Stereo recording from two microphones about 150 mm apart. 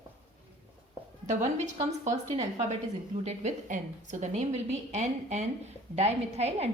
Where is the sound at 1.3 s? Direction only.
50° right (ahead or behind).